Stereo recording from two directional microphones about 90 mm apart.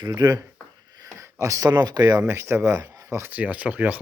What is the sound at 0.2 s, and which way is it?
Speech, 50° right (ahead or behind).